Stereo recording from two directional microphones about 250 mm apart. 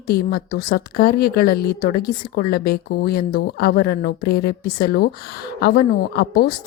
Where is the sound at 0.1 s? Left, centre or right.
Left.